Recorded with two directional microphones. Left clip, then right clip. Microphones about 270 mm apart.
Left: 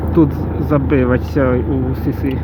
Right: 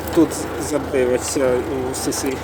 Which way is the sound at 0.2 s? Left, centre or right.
Centre.